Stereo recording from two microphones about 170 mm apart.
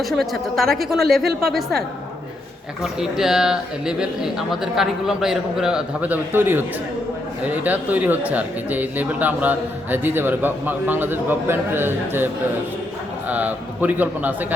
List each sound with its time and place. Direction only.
0.0 s speech: centre (ahead or behind)
1.2 s a woman's voice: 70° right (ahead or behind)
1.5 s speech: centre (ahead or behind)
2.8 s speech: centre (ahead or behind)